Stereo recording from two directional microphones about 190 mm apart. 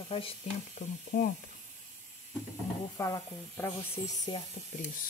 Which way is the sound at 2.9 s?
15° left (ahead or behind).